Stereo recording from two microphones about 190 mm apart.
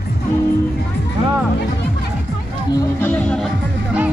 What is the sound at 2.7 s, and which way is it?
Music, 15° left (ahead or behind).